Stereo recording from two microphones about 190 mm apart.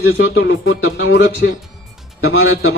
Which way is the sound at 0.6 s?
90° left.